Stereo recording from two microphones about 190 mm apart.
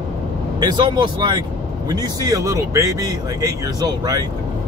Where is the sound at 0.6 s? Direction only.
25° right (ahead or behind).